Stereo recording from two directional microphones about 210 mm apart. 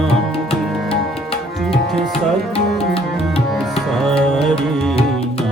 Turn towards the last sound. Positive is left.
turn(degrees=0)  # may be behind; listen again after turning